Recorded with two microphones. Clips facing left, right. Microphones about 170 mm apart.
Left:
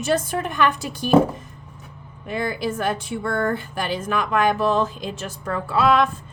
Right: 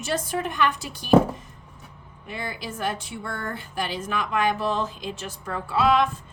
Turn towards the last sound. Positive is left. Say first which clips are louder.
# left 3 dB
turn(degrees=50)  # may be behind; listen again after turning